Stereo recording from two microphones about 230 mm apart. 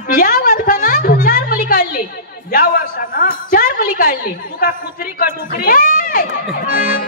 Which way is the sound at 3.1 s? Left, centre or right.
Left.